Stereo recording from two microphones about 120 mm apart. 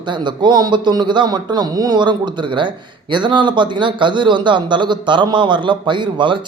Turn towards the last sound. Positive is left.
turn(degrees=-45)  # may be behind; listen again after turning